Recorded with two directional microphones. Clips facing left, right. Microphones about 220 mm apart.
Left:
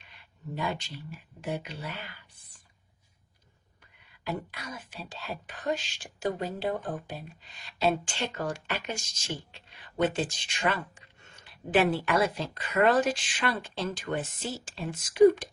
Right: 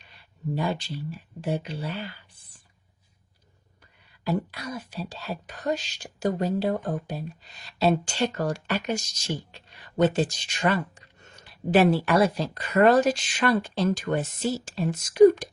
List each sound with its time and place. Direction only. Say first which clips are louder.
0.5 s speech: right 5 dB; 35° right (ahead or behind)
4.2 s speech: right 7 dB; 35° right (ahead or behind)